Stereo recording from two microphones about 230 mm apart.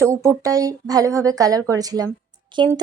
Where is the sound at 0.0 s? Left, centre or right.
Centre.